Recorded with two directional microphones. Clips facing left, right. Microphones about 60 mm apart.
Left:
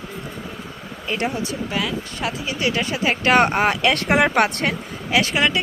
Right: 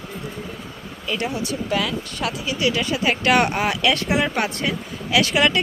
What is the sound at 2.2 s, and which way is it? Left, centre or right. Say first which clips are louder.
Speech: right 1 dB; left.